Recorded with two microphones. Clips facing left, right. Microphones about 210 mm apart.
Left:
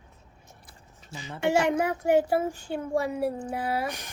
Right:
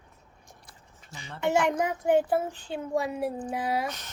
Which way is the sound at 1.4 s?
10° left (ahead or behind).